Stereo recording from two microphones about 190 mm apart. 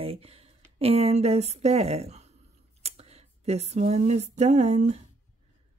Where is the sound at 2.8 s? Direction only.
35° right (ahead or behind).